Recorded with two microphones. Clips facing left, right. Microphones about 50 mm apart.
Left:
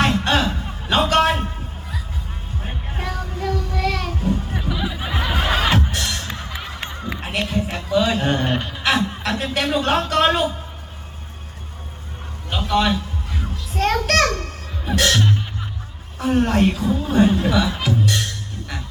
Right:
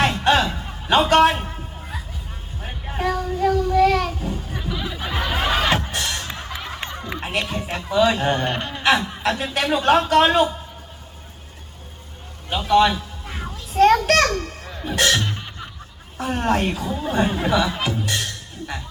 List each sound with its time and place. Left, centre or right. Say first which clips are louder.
0.0 s music: right 1 dB; centre
2.9 s child singing: right 7 dB; centre
4.5 s a sound: left 3 dB; centre
5.9 s music: even; centre
7.0 s speech: left 1 dB; centre
12.5 s a man's voice: right 3 dB; centre
13.2 s music: left 1 dB; right
13.7 s a sound: right 4 dB; centre
14.8 s music: left 1 dB; centre
16.1 s a woman's voice: left 3 dB; centre
17.7 s music: left 3 dB; centre